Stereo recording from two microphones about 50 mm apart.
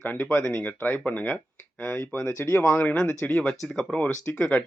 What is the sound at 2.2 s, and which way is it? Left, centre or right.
Speech, left.